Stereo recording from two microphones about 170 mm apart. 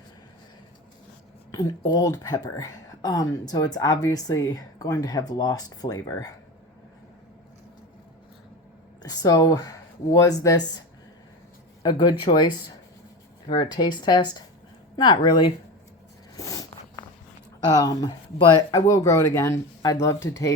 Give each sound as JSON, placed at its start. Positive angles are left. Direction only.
{"t": 1.5, "sound": "speech", "side_deg": 25}
{"t": 9.0, "sound": "speech", "side_deg": 20}
{"t": 16.4, "sound": "a sound", "side_deg": 20}
{"t": 17.7, "sound": "speech", "side_deg": 20}